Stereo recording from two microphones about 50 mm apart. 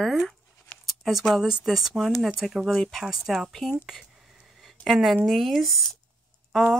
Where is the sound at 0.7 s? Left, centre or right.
Centre.